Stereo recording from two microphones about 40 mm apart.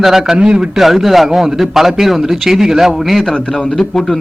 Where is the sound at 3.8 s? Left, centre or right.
Centre.